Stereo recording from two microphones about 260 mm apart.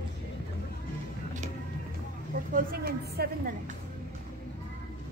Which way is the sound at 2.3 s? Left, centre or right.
Right.